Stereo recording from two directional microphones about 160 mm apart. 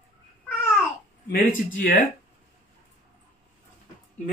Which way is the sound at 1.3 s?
60° left (ahead or behind).